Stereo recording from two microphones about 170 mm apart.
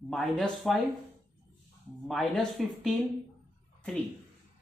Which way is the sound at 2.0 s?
Centre (ahead or behind).